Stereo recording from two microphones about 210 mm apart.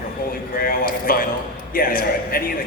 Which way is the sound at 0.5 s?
45° left (ahead or behind).